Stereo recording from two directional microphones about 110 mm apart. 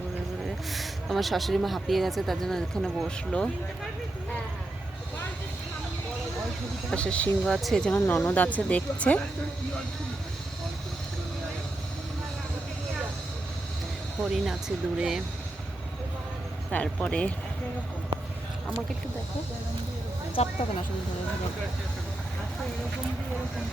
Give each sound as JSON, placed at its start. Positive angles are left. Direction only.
{"t": 0.4, "sound": "speech", "side_deg": 0}
{"t": 6.9, "sound": "speech", "side_deg": 10}
{"t": 7.9, "sound": "speech", "side_deg": 20}
{"t": 14.2, "sound": "speech", "side_deg": 0}
{"t": 16.7, "sound": "speech", "side_deg": 10}
{"t": 20.4, "sound": "speech", "side_deg": 75}